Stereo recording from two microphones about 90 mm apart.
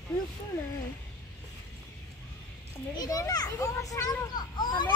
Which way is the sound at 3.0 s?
45° left (ahead or behind).